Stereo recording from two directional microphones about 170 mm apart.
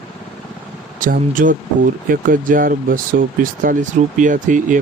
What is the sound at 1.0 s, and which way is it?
Speech, 50° right (ahead or behind).